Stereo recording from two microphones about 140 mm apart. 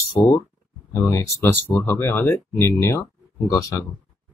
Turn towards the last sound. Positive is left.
turn(degrees=25)  # may be behind; listen again after turning